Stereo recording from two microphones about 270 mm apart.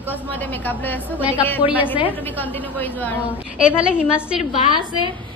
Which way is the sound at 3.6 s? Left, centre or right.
Centre.